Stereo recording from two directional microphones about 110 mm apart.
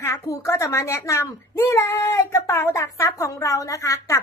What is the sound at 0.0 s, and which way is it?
A woman's voice, 25° left (ahead or behind).